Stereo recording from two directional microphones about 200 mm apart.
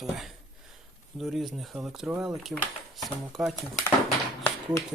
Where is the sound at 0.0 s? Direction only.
Centre (ahead or behind).